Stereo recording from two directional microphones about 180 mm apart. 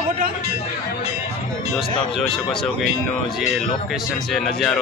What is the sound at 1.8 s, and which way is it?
Speech, centre (ahead or behind).